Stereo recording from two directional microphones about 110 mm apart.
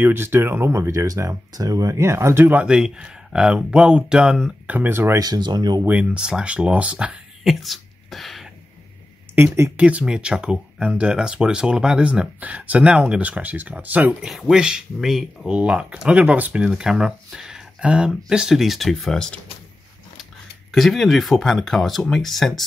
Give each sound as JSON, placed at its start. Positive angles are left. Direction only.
{"t": 0.0, "sound": "speech", "side_deg": -20}
{"t": 5.2, "sound": "speech", "side_deg": -40}
{"t": 5.9, "sound": "speech", "side_deg": -10}
{"t": 7.6, "sound": "a sound", "side_deg": 0}
{"t": 9.8, "sound": "speech", "side_deg": -10}
{"t": 14.2, "sound": "speech", "side_deg": -5}
{"t": 20.7, "sound": "speech", "side_deg": 0}